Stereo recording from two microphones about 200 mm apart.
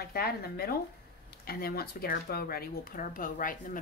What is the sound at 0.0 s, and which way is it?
Speech, 50° left (ahead or behind).